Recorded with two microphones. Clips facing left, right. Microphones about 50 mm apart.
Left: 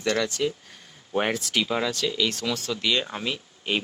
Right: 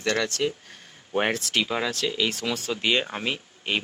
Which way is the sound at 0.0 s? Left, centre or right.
Centre.